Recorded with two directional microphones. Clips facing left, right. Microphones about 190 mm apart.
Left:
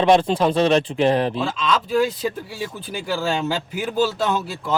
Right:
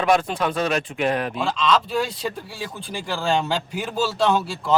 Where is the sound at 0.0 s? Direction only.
30° left (ahead or behind).